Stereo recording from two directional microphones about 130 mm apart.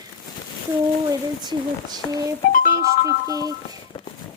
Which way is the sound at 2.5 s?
90° left.